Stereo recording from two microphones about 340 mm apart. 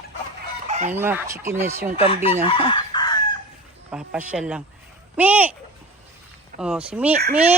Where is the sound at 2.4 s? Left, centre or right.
Centre.